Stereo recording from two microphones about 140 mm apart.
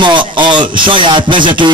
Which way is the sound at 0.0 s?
35° right (ahead or behind).